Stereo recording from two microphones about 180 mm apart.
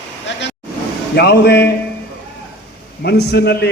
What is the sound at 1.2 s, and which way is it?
Speech, 65° left (ahead or behind).